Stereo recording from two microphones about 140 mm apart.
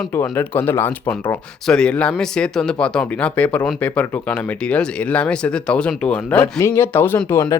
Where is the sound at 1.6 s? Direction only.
5° left (ahead or behind).